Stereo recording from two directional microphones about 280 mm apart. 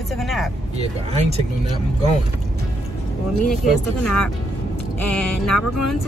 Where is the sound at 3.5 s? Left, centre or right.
Centre.